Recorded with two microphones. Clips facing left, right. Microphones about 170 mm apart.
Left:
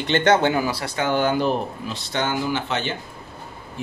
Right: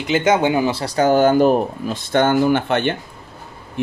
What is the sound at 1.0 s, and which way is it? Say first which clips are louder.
Speech: right 8 dB; 45° right (ahead or behind).